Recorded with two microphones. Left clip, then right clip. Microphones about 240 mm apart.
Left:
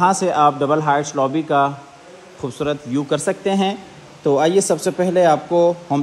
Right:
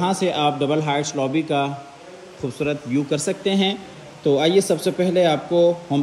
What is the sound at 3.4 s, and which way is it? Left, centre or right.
Speech, centre.